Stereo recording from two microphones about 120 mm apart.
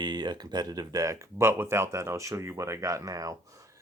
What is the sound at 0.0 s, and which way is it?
Speech, 35° right (ahead or behind).